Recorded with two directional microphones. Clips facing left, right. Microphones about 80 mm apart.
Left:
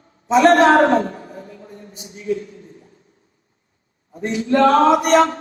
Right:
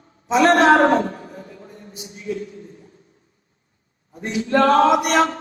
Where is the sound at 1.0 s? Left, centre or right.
Left.